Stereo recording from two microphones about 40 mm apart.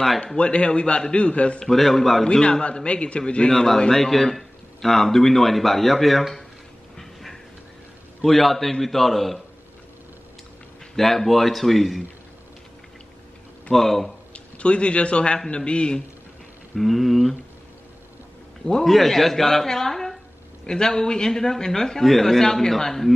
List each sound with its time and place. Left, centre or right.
0.4 s a man's voice: left
1.6 s a man's voice: centre
2.2 s a man's voice: left
3.5 s a man's voice: centre
7.0 s a sound: centre
8.2 s a man's voice: centre
11.0 s a man's voice: centre
13.7 s a man's voice: centre
14.3 s a man's voice: left
16.7 s a man's voice: centre
18.9 s a man's voice: centre
20.6 s a man's voice: centre